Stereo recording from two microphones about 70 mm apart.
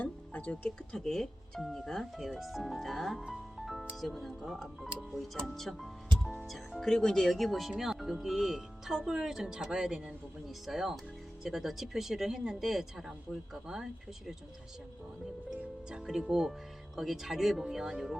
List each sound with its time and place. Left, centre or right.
0.0 s music: left
0.9 s speech: centre
15.4 s speech: centre